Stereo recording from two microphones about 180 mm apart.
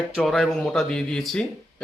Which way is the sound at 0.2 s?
Centre (ahead or behind).